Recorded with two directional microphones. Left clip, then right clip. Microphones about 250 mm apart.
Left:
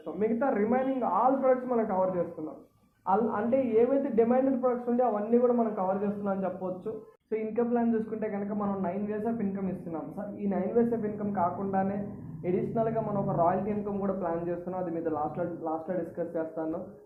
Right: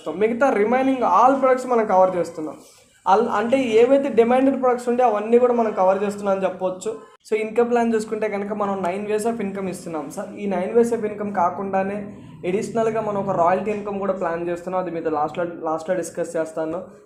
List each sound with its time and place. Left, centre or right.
0.2 s a man's voice: right
3.1 s a man's voice: right